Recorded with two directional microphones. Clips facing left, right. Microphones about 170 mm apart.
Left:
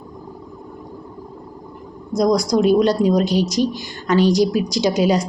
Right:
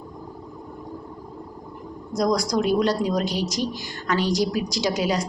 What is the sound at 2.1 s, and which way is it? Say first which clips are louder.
Speech: left 6 dB; 15° left (ahead or behind).